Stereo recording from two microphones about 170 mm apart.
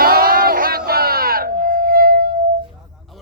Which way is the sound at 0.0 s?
60° right (ahead or behind).